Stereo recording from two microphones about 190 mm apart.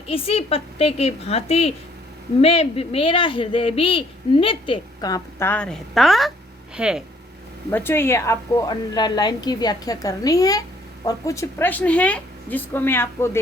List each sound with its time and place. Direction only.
0.1 s a woman's voice: 30° left (ahead or behind); by 7.0 s 5° right (ahead or behind)
7.7 s a man's voice: 10° left (ahead or behind)